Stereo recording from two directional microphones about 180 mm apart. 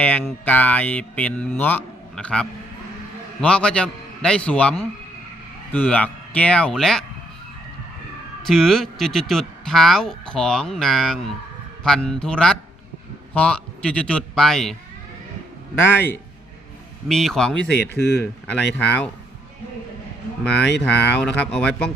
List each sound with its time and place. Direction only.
0.0 s a man's voice: 10° left (ahead or behind)
8.4 s speech: centre (ahead or behind)
15.8 s a man's voice: 10° left (ahead or behind)
17.7 s speech: 65° left (ahead or behind)
18.4 s a man's voice: 10° left (ahead or behind)
20.4 s a man's voice: 5° left (ahead or behind)